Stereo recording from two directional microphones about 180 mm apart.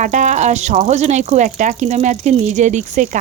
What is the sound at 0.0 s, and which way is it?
A woman's voice, 40° right (ahead or behind).